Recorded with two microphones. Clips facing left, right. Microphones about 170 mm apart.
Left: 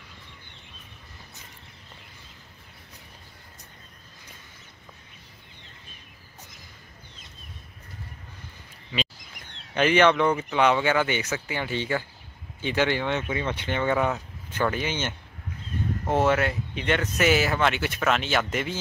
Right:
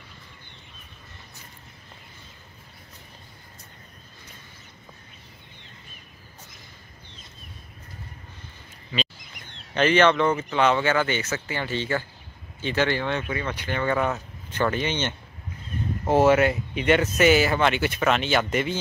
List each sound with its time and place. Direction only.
9.8 s speech: 10° left (ahead or behind)
14.1 s speech: 5° left (ahead or behind)
16.1 s speech: 5° right (ahead or behind)